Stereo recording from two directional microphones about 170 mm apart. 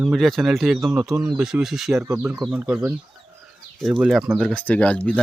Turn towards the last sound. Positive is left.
turn(degrees=5)  # may be behind; listen again after turning